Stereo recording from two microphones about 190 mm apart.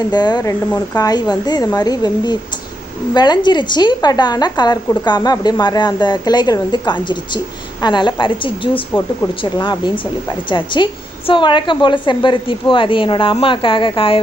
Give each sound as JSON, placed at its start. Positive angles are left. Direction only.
{"t": 0.1, "sound": "a woman's voice", "side_deg": 20}
{"t": 8.7, "sound": "speech", "side_deg": 10}
{"t": 9.4, "sound": "a woman's voice", "side_deg": 25}